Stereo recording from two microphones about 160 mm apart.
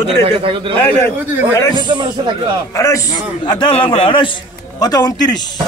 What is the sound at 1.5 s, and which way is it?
Speech, 20° left (ahead or behind).